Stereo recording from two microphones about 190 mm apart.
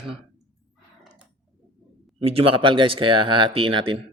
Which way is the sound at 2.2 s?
30° right (ahead or behind).